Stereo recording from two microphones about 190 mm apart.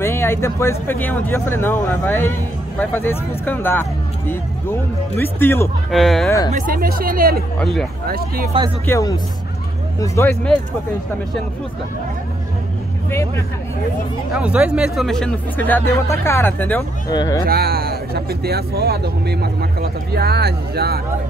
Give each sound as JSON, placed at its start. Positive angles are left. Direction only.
{"t": 0.0, "sound": "speech", "side_deg": 15}
{"t": 5.9, "sound": "speech", "side_deg": 0}
{"t": 6.5, "sound": "speech", "side_deg": -50}
{"t": 7.5, "sound": "speech", "side_deg": 5}
{"t": 8.8, "sound": "speech", "side_deg": 15}
{"t": 14.3, "sound": "speech", "side_deg": -5}
{"t": 17.1, "sound": "speech", "side_deg": 20}
{"t": 17.5, "sound": "speech", "side_deg": -55}